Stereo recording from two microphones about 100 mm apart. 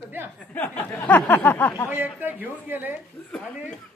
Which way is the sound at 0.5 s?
20° left (ahead or behind).